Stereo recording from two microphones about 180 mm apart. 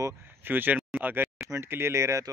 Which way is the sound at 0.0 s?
10° right (ahead or behind).